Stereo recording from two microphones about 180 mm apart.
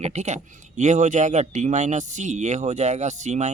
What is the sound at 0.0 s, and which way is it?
Speech, 40° right (ahead or behind).